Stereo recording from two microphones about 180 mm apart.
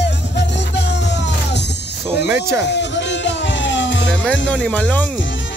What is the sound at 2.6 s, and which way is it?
Music, 75° left (ahead or behind).